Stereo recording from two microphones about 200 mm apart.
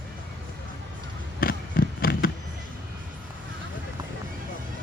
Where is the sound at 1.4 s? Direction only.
45° left (ahead or behind).